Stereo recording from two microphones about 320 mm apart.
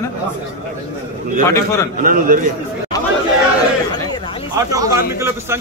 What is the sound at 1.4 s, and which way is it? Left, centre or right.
Speech, centre.